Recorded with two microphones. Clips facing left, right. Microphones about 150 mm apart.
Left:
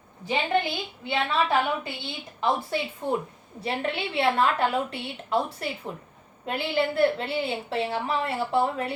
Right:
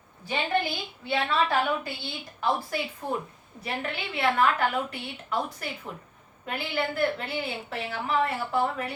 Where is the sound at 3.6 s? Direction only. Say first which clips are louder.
Left 4 dB; 30° left (ahead or behind).